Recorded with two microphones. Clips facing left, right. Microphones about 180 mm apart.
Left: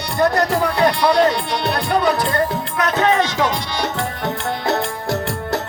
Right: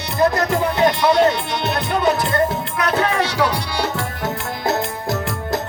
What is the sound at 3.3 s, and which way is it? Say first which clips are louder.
Music: even; 35° right (ahead or behind).